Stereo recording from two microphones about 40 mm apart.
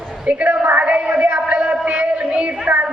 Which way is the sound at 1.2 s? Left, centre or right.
Right.